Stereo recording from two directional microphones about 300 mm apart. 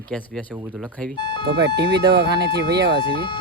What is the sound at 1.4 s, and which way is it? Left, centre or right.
Speech, right.